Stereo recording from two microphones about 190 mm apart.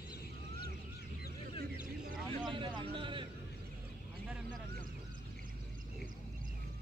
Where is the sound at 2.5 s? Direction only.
25° right (ahead or behind).